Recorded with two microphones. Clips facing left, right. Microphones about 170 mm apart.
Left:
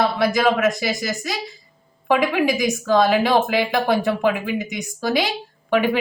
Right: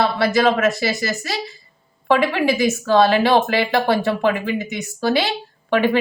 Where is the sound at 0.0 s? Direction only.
15° left (ahead or behind).